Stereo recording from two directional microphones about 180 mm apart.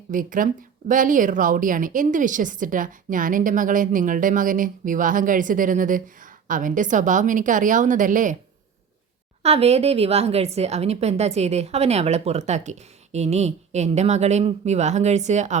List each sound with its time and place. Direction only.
0.1 s a woman's voice: 50° right (ahead or behind)
9.4 s a woman's voice: 35° right (ahead or behind)